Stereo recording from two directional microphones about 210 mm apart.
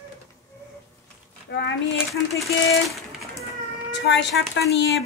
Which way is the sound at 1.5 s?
55° left (ahead or behind).